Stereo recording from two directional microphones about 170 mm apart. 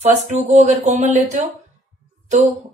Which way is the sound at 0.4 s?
45° right (ahead or behind).